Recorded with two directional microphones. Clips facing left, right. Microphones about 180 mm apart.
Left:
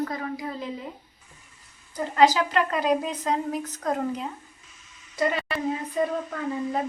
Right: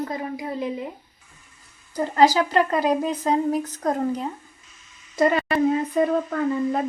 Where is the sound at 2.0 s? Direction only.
35° right (ahead or behind).